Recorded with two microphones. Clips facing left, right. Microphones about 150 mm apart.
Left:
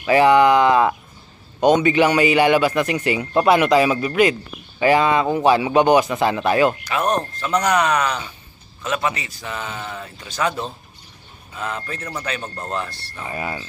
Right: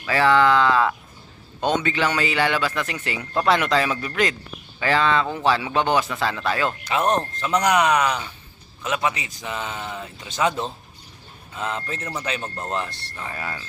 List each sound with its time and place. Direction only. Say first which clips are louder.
0.0 s a man's voice: left 5 dB; 15° left (ahead or behind)
6.8 s a man's voice: even; 20° right (ahead or behind)
13.2 s a man's voice: left 4 dB; 15° left (ahead or behind)